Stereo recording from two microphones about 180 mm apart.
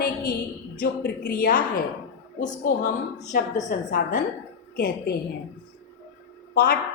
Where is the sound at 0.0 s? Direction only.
50° left (ahead or behind).